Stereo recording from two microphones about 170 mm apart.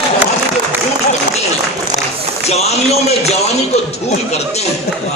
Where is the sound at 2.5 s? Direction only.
40° left (ahead or behind).